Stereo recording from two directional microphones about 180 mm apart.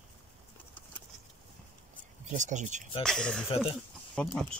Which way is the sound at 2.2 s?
45° right (ahead or behind).